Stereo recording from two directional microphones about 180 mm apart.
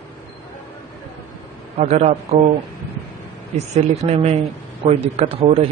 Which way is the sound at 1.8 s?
40° right (ahead or behind).